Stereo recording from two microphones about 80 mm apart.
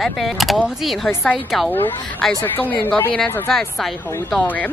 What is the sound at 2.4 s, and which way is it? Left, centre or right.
Speech, left.